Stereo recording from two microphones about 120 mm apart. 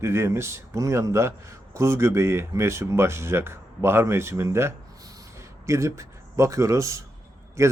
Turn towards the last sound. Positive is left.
turn(degrees=-25)  # may be behind; listen again after turning